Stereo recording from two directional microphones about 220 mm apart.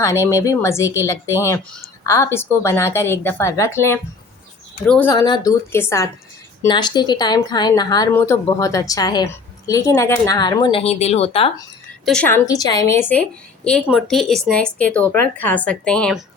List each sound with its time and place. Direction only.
0.0 s speech: 15° left (ahead or behind)
12.0 s speech: 5° left (ahead or behind)